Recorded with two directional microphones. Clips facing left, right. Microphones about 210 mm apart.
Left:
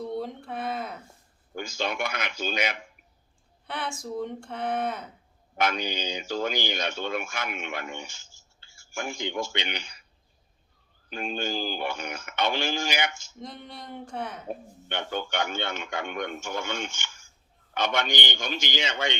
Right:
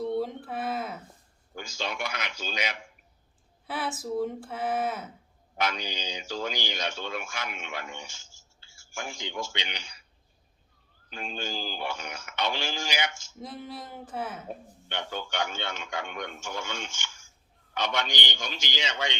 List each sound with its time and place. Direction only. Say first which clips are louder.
0.1 s a sound: right 2 dB; centre (ahead or behind)
1.5 s a man's voice: left 4 dB; 55° left (ahead or behind)
3.7 s speech: right 2 dB; 5° right (ahead or behind)
5.5 s speech: left 4 dB; 55° left (ahead or behind)
11.1 s speech: left 5 dB; 55° left (ahead or behind)
13.4 s speech: right 2 dB; 5° right (ahead or behind)
14.8 s a man's voice: left 4 dB; 55° left (ahead or behind)